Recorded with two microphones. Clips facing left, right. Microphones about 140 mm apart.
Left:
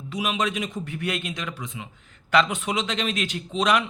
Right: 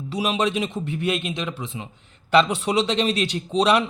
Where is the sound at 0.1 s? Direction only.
30° right (ahead or behind).